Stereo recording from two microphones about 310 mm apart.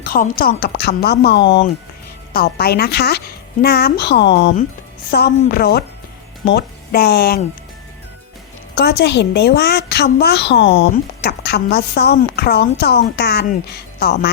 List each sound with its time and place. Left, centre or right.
0.0 s a woman's voice: left
8.7 s a woman's voice: left